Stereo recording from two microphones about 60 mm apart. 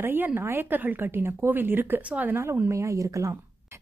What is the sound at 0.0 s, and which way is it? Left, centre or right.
Speech, right.